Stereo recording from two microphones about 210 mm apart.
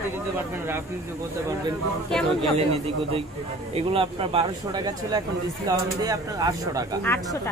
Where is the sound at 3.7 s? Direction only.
25° right (ahead or behind).